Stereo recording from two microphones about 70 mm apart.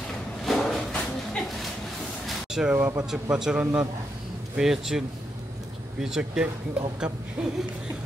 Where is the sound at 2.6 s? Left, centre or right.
Centre.